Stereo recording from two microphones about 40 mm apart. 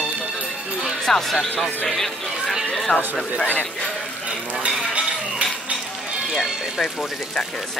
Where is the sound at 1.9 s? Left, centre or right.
Centre.